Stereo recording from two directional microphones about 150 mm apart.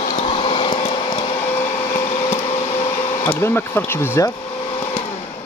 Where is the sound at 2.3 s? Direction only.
45° left (ahead or behind).